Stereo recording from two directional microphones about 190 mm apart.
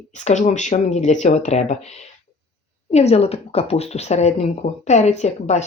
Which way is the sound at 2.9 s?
35° left (ahead or behind).